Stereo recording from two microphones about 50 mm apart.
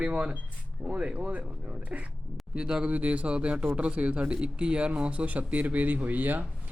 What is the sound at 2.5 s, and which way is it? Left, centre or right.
Speech, centre.